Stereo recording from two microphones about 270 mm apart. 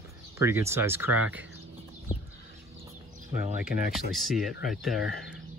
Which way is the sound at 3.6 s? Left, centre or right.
Left.